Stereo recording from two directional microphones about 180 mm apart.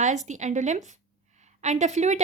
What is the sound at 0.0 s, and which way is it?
A woman's voice, 40° right (ahead or behind).